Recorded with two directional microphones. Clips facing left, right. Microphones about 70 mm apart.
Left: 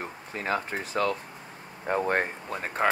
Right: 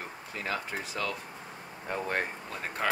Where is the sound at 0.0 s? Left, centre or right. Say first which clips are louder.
Left 4 dB; left.